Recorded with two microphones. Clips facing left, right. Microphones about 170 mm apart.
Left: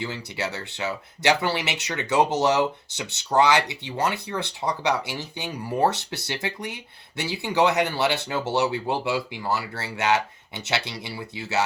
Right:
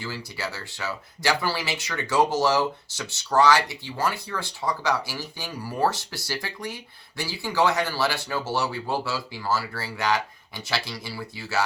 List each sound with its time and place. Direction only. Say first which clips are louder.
0.3 s speech: left 3 dB; 20° left (ahead or behind)